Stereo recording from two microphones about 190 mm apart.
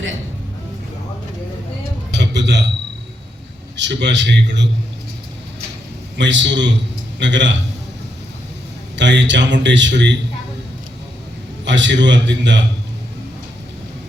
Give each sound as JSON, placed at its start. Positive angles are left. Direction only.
{"t": 2.1, "sound": "a sound", "side_deg": -65}
{"t": 3.8, "sound": "a man's voice", "side_deg": -70}
{"t": 6.1, "sound": "a man's voice", "side_deg": -70}
{"t": 9.0, "sound": "a man's voice", "side_deg": -70}
{"t": 11.6, "sound": "a man's voice", "side_deg": -70}